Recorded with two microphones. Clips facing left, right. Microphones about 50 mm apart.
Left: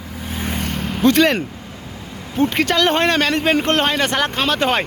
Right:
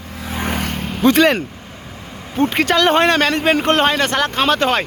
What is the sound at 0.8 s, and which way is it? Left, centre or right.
Vehicle, centre.